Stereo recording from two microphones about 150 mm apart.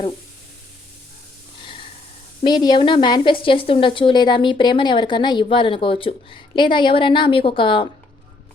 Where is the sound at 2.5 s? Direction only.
30° left (ahead or behind).